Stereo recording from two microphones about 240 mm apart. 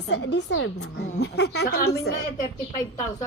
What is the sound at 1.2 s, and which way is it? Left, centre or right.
A woman's voice, left.